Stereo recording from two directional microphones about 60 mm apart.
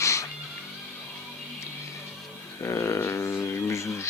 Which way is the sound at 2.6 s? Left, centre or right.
Left.